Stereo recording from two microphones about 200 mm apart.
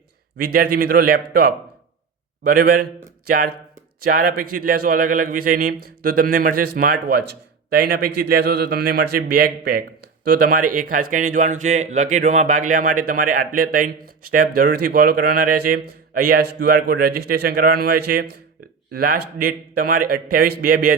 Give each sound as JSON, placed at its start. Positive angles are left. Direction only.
{"t": 0.3, "sound": "a man's voice", "side_deg": -45}